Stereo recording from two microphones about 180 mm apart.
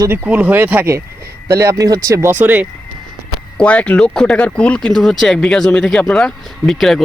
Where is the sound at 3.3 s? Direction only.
5° left (ahead or behind).